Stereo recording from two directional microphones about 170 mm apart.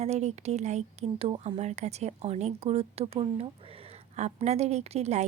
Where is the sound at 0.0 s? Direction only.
40° right (ahead or behind).